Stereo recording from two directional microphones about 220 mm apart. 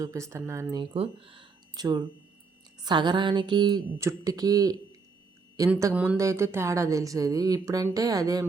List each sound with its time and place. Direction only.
0.0 s speech: 15° right (ahead or behind)